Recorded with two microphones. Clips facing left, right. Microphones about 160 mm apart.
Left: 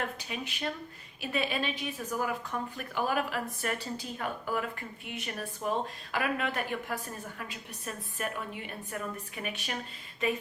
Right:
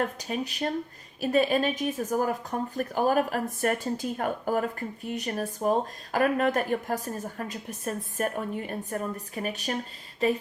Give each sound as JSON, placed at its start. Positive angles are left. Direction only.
{"t": 0.0, "sound": "a woman's voice", "side_deg": -40}